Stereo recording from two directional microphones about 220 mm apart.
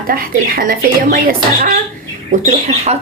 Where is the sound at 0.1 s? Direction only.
40° right (ahead or behind).